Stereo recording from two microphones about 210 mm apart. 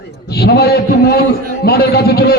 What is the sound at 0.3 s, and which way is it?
A man's voice, 50° left (ahead or behind).